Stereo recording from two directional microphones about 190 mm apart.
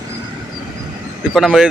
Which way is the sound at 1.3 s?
Centre (ahead or behind).